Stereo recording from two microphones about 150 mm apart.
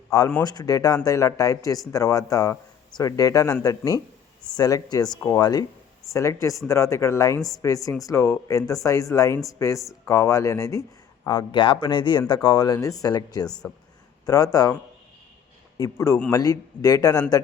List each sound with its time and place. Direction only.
0.1 s speech: 20° left (ahead or behind)
15.8 s speech: 20° left (ahead or behind)